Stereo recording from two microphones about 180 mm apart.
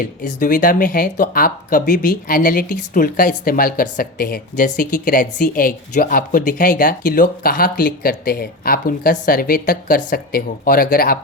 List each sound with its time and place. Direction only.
0.0 s speech: 45° left (ahead or behind)